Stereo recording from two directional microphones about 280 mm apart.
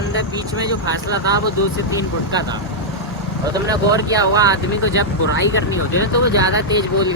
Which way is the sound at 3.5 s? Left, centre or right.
Centre.